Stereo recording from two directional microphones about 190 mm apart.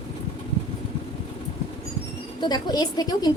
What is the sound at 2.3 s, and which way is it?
Speech, 20° left (ahead or behind).